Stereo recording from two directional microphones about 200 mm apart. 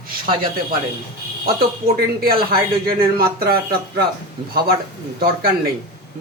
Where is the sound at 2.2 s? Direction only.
50° right (ahead or behind).